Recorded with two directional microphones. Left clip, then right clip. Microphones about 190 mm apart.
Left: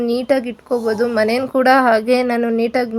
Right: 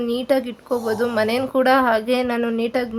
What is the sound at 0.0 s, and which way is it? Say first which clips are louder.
A woman's voice: left 3 dB; 25° left (ahead or behind).